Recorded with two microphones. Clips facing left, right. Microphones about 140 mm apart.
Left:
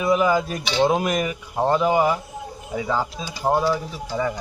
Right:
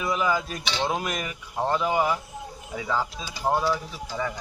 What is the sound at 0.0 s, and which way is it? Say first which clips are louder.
Speech: left 6 dB; 10° left (ahead or behind).